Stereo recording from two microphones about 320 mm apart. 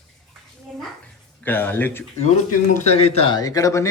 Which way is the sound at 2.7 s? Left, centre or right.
Centre.